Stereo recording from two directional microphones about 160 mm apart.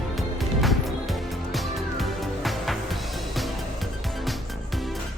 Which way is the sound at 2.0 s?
Centre (ahead or behind).